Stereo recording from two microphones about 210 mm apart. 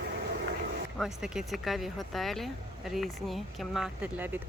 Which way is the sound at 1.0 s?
Centre (ahead or behind).